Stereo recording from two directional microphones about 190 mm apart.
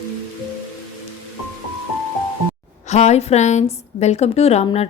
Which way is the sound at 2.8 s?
35° left (ahead or behind).